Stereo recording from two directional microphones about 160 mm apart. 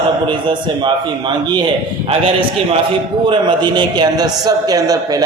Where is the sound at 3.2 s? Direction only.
30° right (ahead or behind).